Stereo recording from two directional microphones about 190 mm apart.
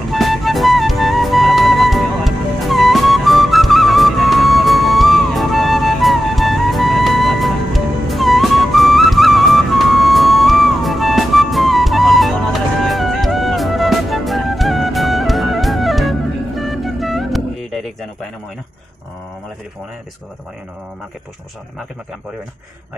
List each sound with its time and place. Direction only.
0.1 s music: centre (ahead or behind)